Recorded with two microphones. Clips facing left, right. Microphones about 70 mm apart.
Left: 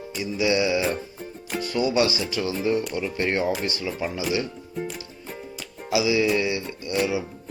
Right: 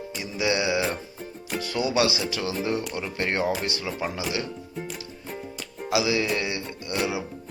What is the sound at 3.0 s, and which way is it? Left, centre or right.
Speech, right.